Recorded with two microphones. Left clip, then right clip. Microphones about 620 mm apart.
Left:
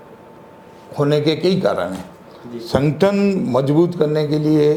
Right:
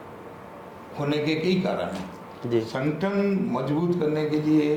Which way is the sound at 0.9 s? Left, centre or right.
Left.